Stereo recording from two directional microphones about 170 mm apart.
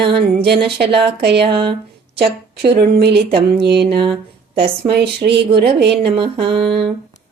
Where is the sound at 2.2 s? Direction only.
70° right (ahead or behind).